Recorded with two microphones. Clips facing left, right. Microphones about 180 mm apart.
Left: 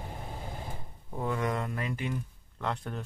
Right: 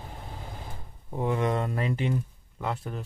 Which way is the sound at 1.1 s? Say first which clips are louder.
Right 4 dB; 20° right (ahead or behind).